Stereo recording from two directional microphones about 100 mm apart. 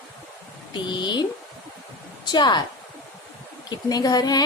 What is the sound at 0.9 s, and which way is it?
Speech, 50° left (ahead or behind).